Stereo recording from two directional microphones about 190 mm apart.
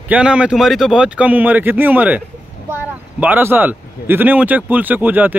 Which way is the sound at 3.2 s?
10° right (ahead or behind).